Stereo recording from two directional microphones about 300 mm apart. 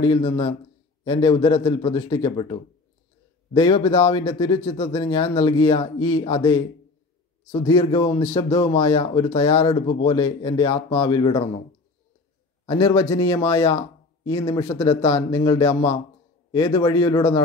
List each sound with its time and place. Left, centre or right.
0.0 s speech: centre
7.6 s speech: centre
12.6 s speech: centre